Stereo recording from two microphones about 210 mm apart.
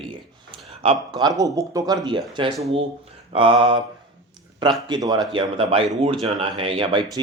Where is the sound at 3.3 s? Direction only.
25° right (ahead or behind).